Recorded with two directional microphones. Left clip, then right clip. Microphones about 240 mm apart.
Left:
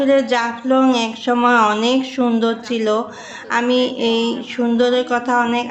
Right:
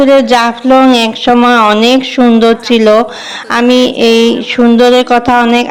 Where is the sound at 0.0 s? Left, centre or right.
Right.